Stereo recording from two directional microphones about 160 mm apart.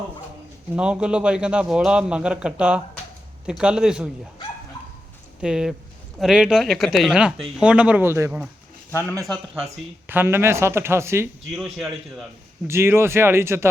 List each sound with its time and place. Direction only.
0.8 s speech: 5° right (ahead or behind)
5.4 s speech: 5° right (ahead or behind)
8.9 s speech: 15° left (ahead or behind)
9.6 s speech: 15° right (ahead or behind)
11.5 s speech: centre (ahead or behind)
12.6 s speech: 15° right (ahead or behind)